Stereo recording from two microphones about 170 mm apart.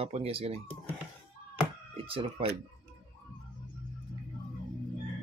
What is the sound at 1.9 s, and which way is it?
Speech, 35° right (ahead or behind).